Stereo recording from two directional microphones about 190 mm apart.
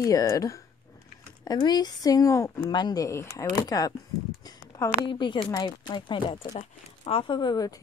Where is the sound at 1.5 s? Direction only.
20° left (ahead or behind).